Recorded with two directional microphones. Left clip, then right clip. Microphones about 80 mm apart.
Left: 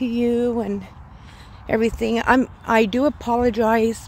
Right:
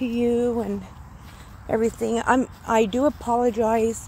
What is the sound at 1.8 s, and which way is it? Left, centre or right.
Speech, left.